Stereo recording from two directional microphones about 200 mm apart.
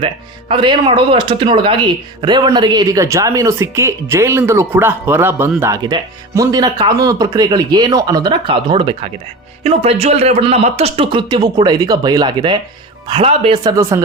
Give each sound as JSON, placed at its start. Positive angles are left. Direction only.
{"t": 0.0, "sound": "speech", "side_deg": -25}